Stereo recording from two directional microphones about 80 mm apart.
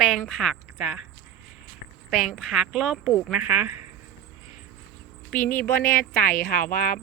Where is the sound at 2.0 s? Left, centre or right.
Centre.